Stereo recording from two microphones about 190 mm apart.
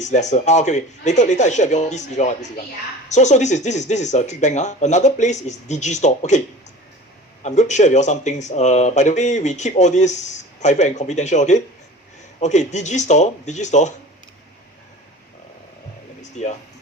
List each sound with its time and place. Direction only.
0.0 s speech: 40° left (ahead or behind)
7.4 s speech: 40° left (ahead or behind)
16.3 s speech: 35° left (ahead or behind)